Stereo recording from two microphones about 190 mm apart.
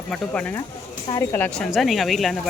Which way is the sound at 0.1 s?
5° left (ahead or behind).